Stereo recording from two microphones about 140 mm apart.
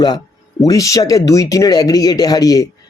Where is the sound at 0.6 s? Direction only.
25° left (ahead or behind).